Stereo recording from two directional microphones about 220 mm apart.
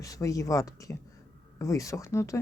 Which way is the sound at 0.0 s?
15° left (ahead or behind).